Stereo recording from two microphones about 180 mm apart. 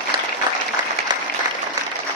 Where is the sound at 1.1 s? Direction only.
25° right (ahead or behind).